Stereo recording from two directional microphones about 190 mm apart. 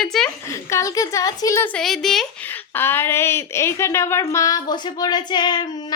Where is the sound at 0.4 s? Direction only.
15° left (ahead or behind).